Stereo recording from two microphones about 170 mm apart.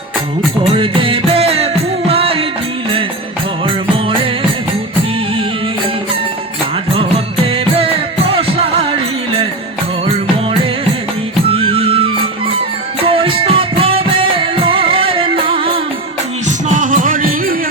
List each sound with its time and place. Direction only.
0.6 s music: 30° right (ahead or behind)
3.9 s music: 30° right (ahead or behind)
7.8 s music: 35° right (ahead or behind)
11.5 s music: 35° right (ahead or behind)
16.6 s music: 50° right (ahead or behind)